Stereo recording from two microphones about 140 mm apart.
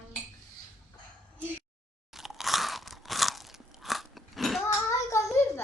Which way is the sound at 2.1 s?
Centre (ahead or behind).